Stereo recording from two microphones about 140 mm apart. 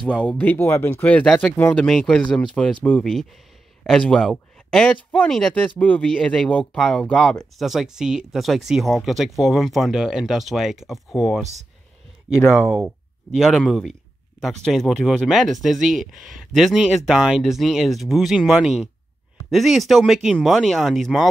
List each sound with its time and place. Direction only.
0.0 s speech: 10° left (ahead or behind)
1.9 s speech: 5° left (ahead or behind)
12.6 s speech: 15° right (ahead or behind)
13.4 s speech: centre (ahead or behind)